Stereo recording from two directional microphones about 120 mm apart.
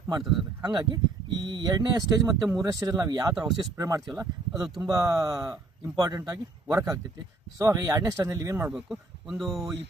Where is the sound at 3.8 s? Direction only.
30° right (ahead or behind).